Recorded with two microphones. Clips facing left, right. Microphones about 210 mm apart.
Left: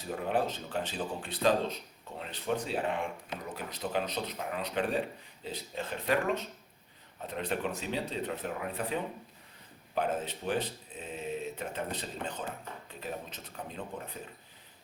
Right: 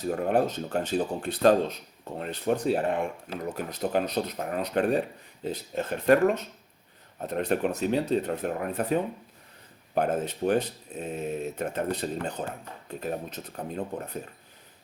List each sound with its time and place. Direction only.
0.1 s speech: 50° right (ahead or behind)